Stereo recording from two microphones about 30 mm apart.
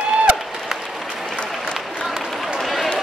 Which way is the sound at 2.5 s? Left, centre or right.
Centre.